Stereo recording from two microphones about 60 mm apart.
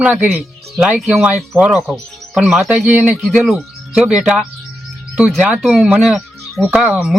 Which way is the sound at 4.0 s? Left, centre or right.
Right.